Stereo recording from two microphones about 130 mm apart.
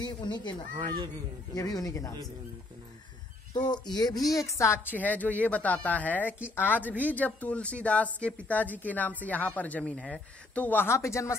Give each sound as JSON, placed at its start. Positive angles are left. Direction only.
{"t": 0.0, "sound": "speech", "side_deg": 35}
{"t": 0.7, "sound": "speech", "side_deg": -35}
{"t": 1.5, "sound": "speech", "side_deg": 30}
{"t": 3.5, "sound": "a woman's voice", "side_deg": 35}